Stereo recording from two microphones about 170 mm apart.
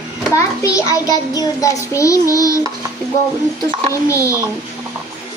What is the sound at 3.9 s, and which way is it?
Speech, 20° left (ahead or behind).